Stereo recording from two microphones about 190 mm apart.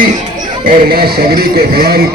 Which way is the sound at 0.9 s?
55° right (ahead or behind).